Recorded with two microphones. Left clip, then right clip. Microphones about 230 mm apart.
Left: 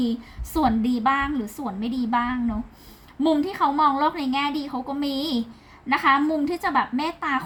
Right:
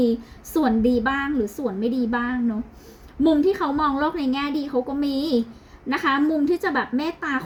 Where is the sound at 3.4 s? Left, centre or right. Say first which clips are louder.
Even; left.